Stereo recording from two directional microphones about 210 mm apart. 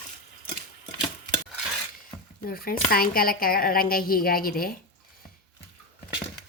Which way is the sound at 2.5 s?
45° left (ahead or behind).